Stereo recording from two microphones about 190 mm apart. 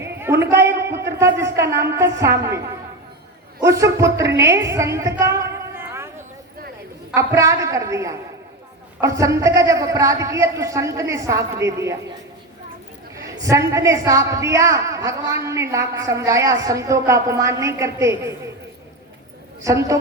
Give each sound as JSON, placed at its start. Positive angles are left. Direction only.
{"t": 0.2, "sound": "a woman's voice", "side_deg": -15}
{"t": 3.6, "sound": "a woman's voice", "side_deg": -15}
{"t": 7.1, "sound": "a man's voice", "side_deg": -15}
{"t": 13.1, "sound": "a man's voice", "side_deg": -15}
{"t": 19.6, "sound": "a man's voice", "side_deg": -15}